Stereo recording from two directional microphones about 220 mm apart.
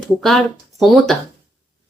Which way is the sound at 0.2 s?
Centre (ahead or behind).